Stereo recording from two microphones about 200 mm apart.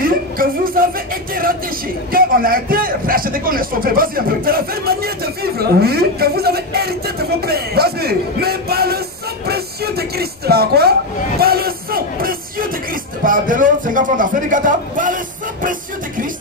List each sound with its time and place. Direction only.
0.0 s music: 45° right (ahead or behind)
2.1 s a man's voice: 45° right (ahead or behind)
7.4 s music: 50° right (ahead or behind)
9.5 s vehicle: 50° right (ahead or behind)
13.2 s a man's voice: 40° right (ahead or behind)